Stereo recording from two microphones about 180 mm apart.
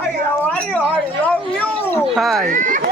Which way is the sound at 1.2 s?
10° left (ahead or behind).